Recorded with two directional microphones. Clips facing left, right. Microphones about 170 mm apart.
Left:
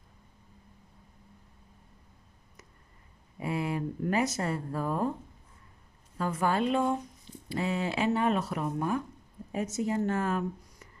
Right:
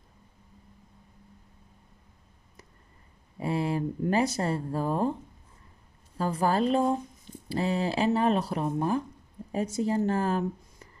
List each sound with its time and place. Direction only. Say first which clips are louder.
3.3 s speech: right 3 dB; 30° right (ahead or behind)
6.1 s speech: right 2 dB; 35° right (ahead or behind)